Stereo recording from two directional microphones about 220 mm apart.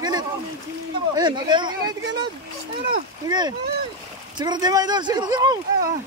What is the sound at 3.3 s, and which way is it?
Speech, 20° right (ahead or behind).